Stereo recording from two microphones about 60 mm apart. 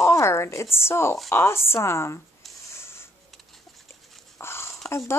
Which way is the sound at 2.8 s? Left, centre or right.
Left.